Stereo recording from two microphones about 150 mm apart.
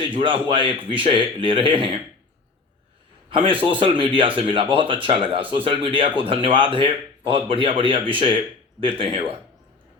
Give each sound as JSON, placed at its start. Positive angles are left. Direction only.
{"t": 0.1, "sound": "speech", "side_deg": -35}
{"t": 3.2, "sound": "speech", "side_deg": -35}